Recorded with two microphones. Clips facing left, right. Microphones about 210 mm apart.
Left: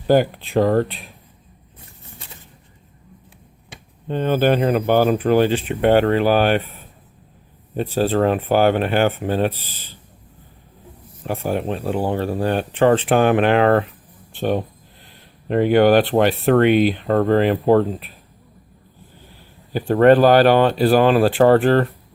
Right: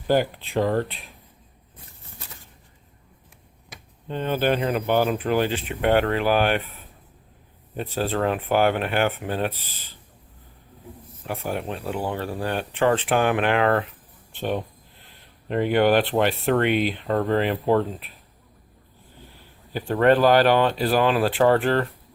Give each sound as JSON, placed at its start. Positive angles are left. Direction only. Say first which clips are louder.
{"t": 0.1, "sound": "speech", "louder": "left 5 dB", "side_deg": 50}
{"t": 3.7, "sound": "a sound", "louder": "left 3 dB", "side_deg": 30}
{"t": 4.1, "sound": "speech", "louder": "left 5 dB", "side_deg": 45}
{"t": 7.8, "sound": "speech", "louder": "left 7 dB", "side_deg": 35}
{"t": 11.3, "sound": "speech", "louder": "left 6 dB", "side_deg": 35}
{"t": 15.4, "sound": "speech", "louder": "left 5 dB", "side_deg": 45}
{"t": 19.7, "sound": "speech", "louder": "left 6 dB", "side_deg": 45}